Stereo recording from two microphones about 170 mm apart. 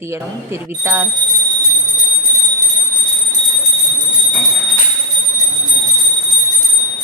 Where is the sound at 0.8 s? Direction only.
15° right (ahead or behind).